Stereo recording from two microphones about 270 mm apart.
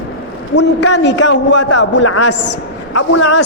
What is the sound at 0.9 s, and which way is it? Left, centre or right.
A man's voice, left.